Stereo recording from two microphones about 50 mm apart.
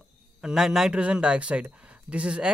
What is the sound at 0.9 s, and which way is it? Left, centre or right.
Speech, right.